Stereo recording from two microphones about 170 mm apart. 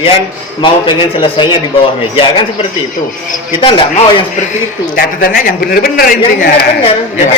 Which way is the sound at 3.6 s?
30° left (ahead or behind).